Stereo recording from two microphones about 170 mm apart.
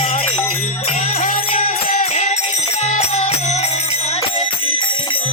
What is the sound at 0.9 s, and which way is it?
Music, 40° left (ahead or behind).